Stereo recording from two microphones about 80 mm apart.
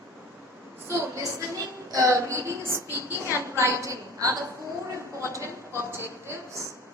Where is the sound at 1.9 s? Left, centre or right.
Right.